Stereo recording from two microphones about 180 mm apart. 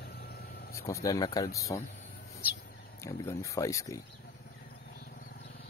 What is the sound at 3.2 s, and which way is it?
Speech, 15° left (ahead or behind).